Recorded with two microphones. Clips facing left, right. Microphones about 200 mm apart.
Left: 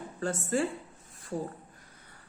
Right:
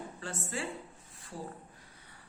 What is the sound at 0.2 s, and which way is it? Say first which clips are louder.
Speech: left 11 dB; 45° left (ahead or behind).